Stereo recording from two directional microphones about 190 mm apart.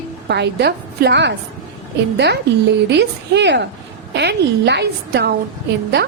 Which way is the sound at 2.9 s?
65° right (ahead or behind).